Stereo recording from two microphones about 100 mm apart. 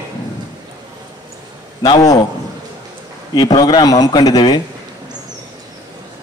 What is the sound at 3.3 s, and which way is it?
A man's voice, 40° left (ahead or behind).